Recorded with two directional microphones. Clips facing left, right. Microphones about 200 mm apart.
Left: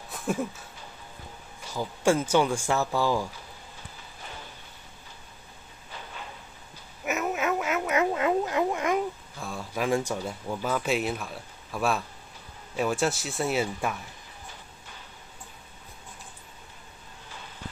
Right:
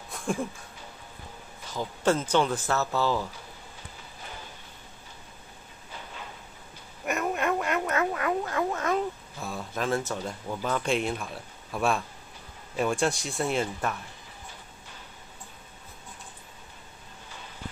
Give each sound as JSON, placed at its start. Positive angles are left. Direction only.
{"t": 0.1, "sound": "a sound", "side_deg": 5}
{"t": 1.7, "sound": "speech", "side_deg": 10}
{"t": 7.1, "sound": "quack", "side_deg": 5}
{"t": 7.9, "sound": "cat", "side_deg": 20}
{"t": 9.4, "sound": "a sound", "side_deg": 0}
{"t": 9.8, "sound": "speech", "side_deg": 15}